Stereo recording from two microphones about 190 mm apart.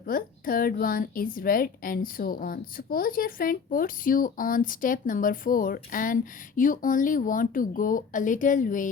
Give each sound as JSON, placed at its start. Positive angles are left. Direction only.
{"t": 0.0, "sound": "speech", "side_deg": 50}